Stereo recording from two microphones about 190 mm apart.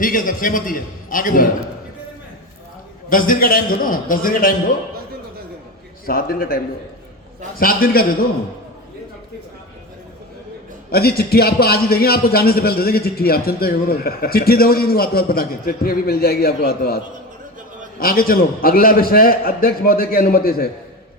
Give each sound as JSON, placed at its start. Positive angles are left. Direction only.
{"t": 0.0, "sound": "a man's voice", "side_deg": 45}
{"t": 3.1, "sound": "a man's voice", "side_deg": 45}
{"t": 6.1, "sound": "a man's voice", "side_deg": 50}
{"t": 7.6, "sound": "a man's voice", "side_deg": 50}
{"t": 10.9, "sound": "a man's voice", "side_deg": 55}
{"t": 18.0, "sound": "a man's voice", "side_deg": 50}